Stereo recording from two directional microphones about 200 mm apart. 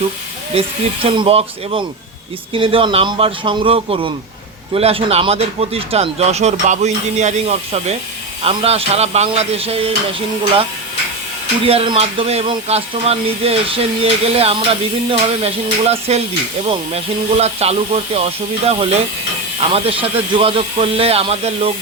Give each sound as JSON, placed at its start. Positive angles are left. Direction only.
{"t": 1.1, "sound": "speech", "side_deg": -25}
{"t": 11.6, "sound": "speech", "side_deg": -30}